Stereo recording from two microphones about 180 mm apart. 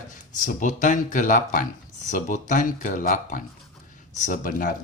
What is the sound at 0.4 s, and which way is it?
Speech, 45° left (ahead or behind).